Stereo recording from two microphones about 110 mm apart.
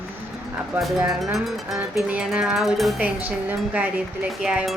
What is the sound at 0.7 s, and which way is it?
Music, centre (ahead or behind).